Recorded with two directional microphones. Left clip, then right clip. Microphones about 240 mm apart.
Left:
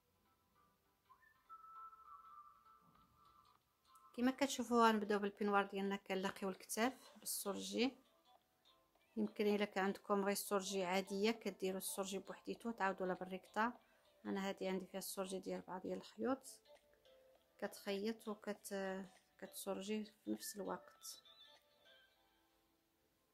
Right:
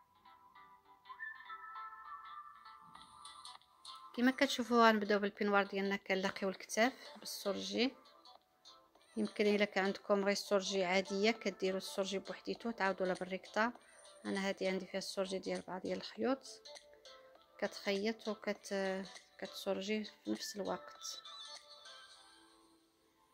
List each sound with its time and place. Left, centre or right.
1.4 s music: right
4.1 s speech: centre
9.1 s speech: centre
16.6 s music: right
17.6 s speech: centre
21.2 s music: right